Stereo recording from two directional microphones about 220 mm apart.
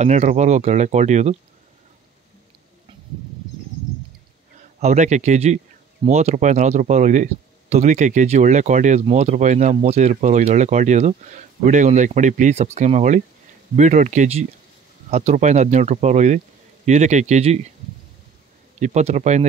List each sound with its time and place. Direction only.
0.0 s speech: 30° right (ahead or behind)
4.7 s speech: 30° right (ahead or behind)
18.8 s speech: 30° right (ahead or behind)